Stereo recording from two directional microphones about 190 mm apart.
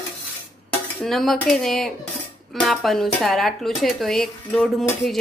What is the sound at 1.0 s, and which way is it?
Speech, centre (ahead or behind).